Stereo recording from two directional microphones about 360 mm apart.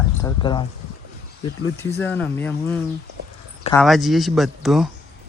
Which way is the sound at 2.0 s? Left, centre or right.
Centre.